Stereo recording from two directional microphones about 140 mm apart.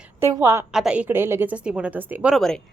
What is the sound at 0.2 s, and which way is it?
Speech, 20° right (ahead or behind).